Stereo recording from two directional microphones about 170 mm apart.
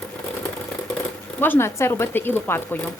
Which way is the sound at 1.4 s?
15° left (ahead or behind).